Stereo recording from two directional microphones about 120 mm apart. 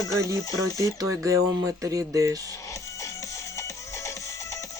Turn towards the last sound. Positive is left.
turn(degrees=25)  # may be behind; listen again after turning